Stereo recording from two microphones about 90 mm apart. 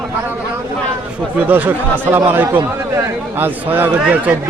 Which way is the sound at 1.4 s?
20° right (ahead or behind).